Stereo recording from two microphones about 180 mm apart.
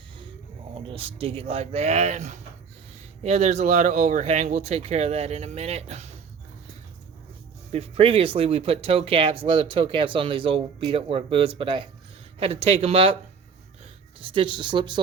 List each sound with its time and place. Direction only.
0.7 s speech: 30° right (ahead or behind)
7.7 s speech: 35° right (ahead or behind)
14.2 s speech: 30° right (ahead or behind)